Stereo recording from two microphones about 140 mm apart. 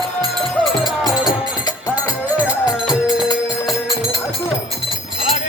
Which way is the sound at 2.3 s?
10° right (ahead or behind).